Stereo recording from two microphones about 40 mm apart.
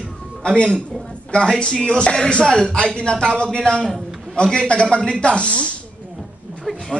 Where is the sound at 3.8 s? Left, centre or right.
Centre.